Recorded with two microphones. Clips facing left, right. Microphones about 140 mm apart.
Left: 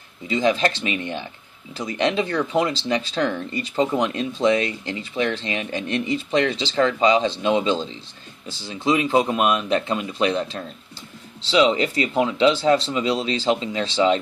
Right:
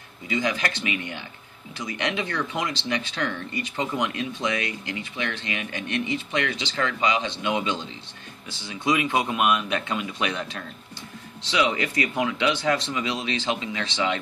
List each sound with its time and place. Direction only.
0.3 s speech: 30° left (ahead or behind)